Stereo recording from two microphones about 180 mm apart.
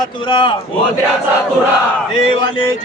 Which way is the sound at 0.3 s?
25° left (ahead or behind).